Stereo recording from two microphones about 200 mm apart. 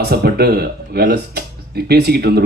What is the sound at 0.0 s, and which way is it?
A man's voice, 50° right (ahead or behind).